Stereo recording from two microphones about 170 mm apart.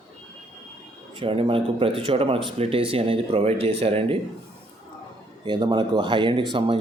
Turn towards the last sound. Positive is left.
turn(degrees=-30)  # may be behind; listen again after turning